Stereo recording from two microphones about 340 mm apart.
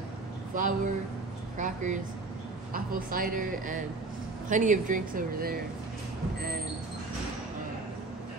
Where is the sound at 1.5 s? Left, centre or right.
Right.